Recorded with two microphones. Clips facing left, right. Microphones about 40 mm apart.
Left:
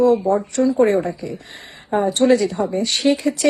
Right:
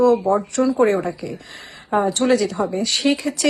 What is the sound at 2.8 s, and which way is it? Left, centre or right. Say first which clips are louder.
Speech: left 1 dB; left.